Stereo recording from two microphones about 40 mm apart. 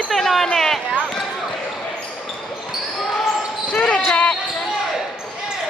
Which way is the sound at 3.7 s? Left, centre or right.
Left.